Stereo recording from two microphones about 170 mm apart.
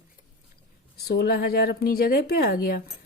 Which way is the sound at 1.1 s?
65° left (ahead or behind).